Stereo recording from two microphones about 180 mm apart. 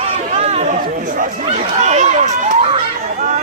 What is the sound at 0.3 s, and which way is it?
Chatter, 35° right (ahead or behind).